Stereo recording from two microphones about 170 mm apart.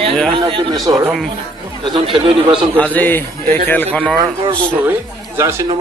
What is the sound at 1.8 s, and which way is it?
Speech, 30° right (ahead or behind).